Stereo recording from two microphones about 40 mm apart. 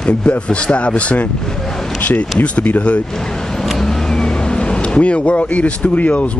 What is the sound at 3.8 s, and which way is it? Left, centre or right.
Vehicle, centre.